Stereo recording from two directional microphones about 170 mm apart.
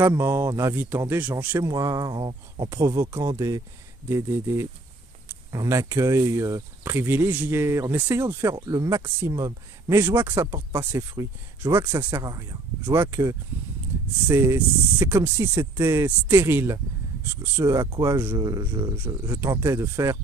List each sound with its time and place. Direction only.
0.0 s speech: 15° right (ahead or behind)